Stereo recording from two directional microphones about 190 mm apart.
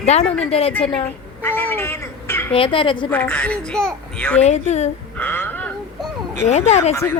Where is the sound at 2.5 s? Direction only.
25° left (ahead or behind).